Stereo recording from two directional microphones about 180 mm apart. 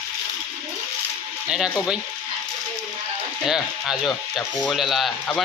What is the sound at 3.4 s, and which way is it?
A man's voice, centre (ahead or behind).